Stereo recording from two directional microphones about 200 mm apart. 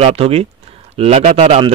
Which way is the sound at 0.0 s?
30° right (ahead or behind).